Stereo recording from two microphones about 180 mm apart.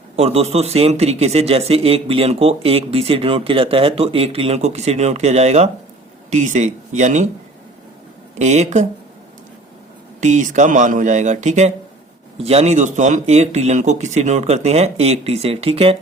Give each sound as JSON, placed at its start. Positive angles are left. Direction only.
{"t": 0.2, "sound": "a man's voice", "side_deg": -35}
{"t": 8.4, "sound": "a man's voice", "side_deg": -40}
{"t": 10.2, "sound": "a man's voice", "side_deg": -40}